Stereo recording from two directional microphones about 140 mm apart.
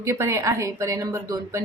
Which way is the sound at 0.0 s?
20° right (ahead or behind).